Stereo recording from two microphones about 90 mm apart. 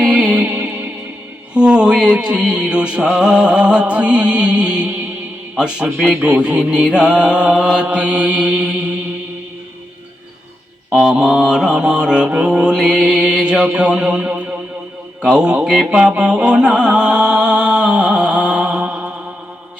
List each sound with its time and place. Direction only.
0.0 s music: 10° right (ahead or behind)
0.4 s music: 20° right (ahead or behind)
1.5 s mantra: 10° right (ahead or behind)
11.1 s mantra: 10° right (ahead or behind)
15.2 s music: 10° right (ahead or behind)